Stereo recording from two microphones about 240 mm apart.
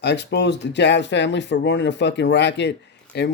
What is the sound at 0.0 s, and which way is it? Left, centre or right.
Speech, left.